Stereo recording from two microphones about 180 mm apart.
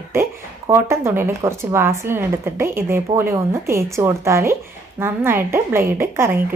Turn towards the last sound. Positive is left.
turn(degrees=-10)  # may be behind; listen again after turning